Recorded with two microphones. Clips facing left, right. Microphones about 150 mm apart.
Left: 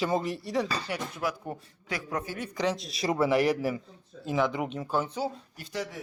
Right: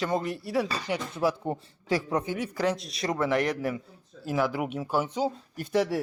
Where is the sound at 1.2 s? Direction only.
30° right (ahead or behind).